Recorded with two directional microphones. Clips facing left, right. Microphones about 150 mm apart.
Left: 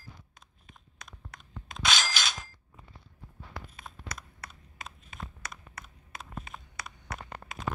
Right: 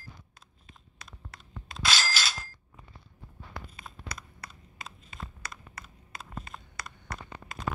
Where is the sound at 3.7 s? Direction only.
Centre (ahead or behind).